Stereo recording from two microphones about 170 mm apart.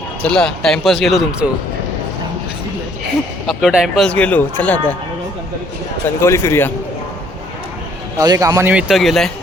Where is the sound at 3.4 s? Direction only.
5° right (ahead or behind).